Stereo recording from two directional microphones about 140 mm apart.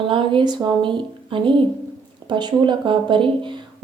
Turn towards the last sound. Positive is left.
turn(degrees=-35)  # may be behind; listen again after turning